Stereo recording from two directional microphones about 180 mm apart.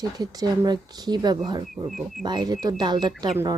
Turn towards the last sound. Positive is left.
turn(degrees=-20)  # may be behind; listen again after turning